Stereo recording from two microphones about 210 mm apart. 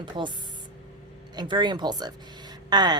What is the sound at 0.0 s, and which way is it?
Speech, 20° right (ahead or behind).